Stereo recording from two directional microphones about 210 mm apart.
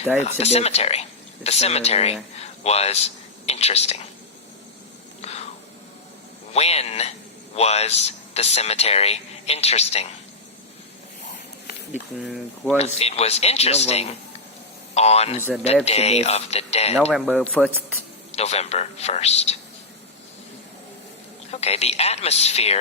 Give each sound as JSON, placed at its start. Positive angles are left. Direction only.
{"t": 0.2, "sound": "speech", "side_deg": 30}
{"t": 5.2, "sound": "a sound", "side_deg": 30}
{"t": 6.5, "sound": "speech", "side_deg": 30}
{"t": 11.9, "sound": "speech", "side_deg": 0}
{"t": 12.8, "sound": "speech", "side_deg": 30}
{"t": 15.4, "sound": "speech", "side_deg": -10}
{"t": 15.6, "sound": "speech", "side_deg": 30}
{"t": 17.1, "sound": "speech", "side_deg": 0}
{"t": 18.3, "sound": "speech", "side_deg": 30}
{"t": 21.5, "sound": "speech", "side_deg": 30}